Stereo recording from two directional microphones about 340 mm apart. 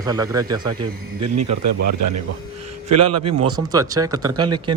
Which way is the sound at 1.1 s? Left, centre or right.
Right.